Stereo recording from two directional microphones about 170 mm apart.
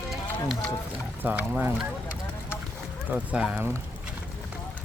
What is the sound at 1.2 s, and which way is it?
Speech, 10° right (ahead or behind).